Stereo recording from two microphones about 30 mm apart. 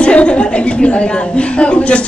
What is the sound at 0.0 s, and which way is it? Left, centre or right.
A woman's voice, left.